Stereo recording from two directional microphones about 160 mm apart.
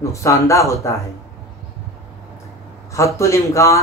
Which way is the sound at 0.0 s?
20° left (ahead or behind).